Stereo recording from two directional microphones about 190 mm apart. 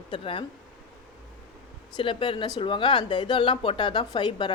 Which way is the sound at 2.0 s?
25° left (ahead or behind).